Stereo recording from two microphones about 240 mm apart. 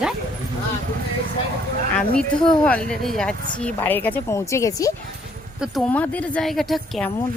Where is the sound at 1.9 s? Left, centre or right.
Centre.